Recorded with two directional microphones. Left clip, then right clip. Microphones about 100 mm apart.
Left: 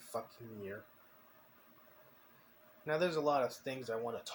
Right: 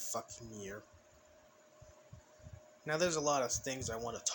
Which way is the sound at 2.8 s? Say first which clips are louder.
Even; 90° right.